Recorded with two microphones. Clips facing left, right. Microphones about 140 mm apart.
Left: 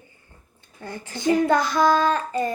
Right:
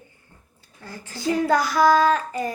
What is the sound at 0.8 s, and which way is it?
Speech, 20° left (ahead or behind).